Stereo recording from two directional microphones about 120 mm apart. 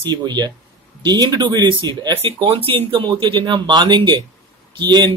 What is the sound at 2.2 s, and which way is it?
Speech, 50° right (ahead or behind).